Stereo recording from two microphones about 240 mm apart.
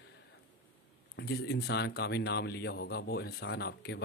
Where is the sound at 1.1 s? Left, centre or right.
Left.